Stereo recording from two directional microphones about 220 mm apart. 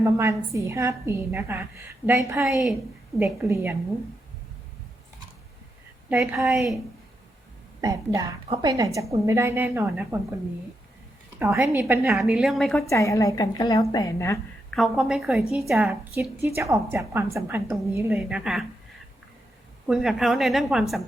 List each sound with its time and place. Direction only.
0.0 s a woman's voice: 15° right (ahead or behind)
2.4 s a woman's voice: centre (ahead or behind)
6.1 s a woman's voice: 5° right (ahead or behind)
7.8 s a woman's voice: 15° right (ahead or behind)
11.3 s a woman's voice: 10° right (ahead or behind)
12.1 s a woman's voice: centre (ahead or behind)
12.9 s a woman's voice: 15° left (ahead or behind)
14.7 s a woman's voice: centre (ahead or behind)
19.9 s a woman's voice: centre (ahead or behind)